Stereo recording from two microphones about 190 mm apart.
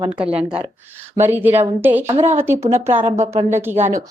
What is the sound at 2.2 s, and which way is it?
Speech, 35° right (ahead or behind).